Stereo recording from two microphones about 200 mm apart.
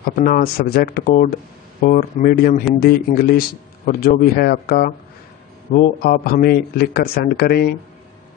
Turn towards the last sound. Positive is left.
turn(degrees=50)  # may be behind; listen again after turning